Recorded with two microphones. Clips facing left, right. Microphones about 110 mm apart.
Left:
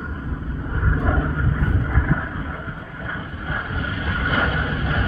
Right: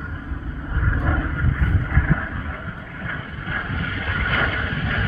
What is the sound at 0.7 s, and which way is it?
Vehicle, 25° left (ahead or behind).